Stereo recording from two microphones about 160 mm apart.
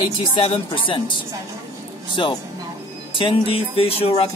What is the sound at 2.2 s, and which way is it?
A woman's voice, 30° left (ahead or behind).